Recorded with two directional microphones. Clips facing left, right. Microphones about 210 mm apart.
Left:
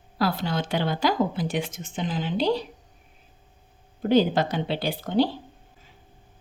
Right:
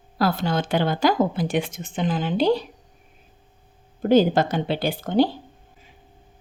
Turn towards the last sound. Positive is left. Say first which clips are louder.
# right 3 dB
turn(degrees=-50)  # may be behind; listen again after turning